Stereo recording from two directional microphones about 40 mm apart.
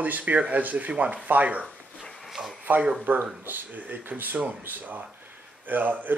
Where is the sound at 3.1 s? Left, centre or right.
Right.